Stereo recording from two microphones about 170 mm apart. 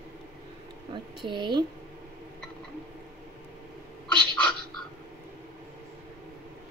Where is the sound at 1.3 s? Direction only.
25° right (ahead or behind).